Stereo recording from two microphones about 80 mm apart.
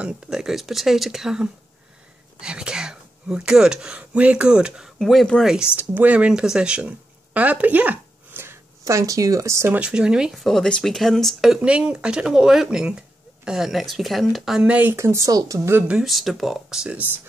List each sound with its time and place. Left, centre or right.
0.0 s speech: centre
4.9 s speech: centre
5.8 s speech: right
8.8 s speech: right
9.8 s speech: centre
10.3 s speech: centre
11.4 s speech: centre
14.6 s speech: right
15.0 s speech: right
15.9 s speech: centre